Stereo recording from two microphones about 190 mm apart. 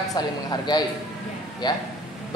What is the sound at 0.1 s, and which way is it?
A man's voice, 20° left (ahead or behind).